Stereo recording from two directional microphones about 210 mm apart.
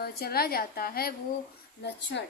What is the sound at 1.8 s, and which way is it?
Speech, 55° left (ahead or behind).